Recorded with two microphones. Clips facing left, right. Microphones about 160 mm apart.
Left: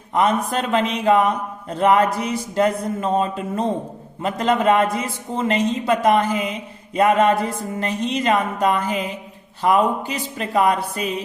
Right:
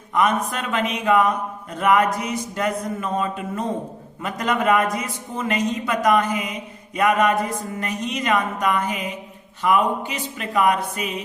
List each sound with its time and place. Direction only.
0.1 s a man's voice: 30° left (ahead or behind)